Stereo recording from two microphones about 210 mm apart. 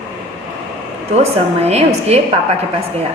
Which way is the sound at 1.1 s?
30° right (ahead or behind).